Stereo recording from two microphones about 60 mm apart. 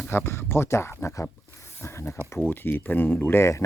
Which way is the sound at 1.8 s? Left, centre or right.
Left.